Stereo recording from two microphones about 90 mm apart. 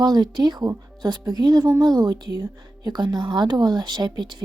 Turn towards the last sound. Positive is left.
turn(degrees=-55)  # may be behind; listen again after turning